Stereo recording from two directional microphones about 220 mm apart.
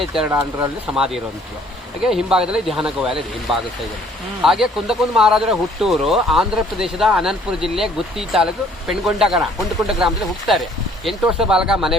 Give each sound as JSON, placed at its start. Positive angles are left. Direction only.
{"t": 0.1, "sound": "speech", "side_deg": -5}